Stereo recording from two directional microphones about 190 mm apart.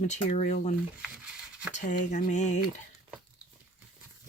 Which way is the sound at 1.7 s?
40° left (ahead or behind).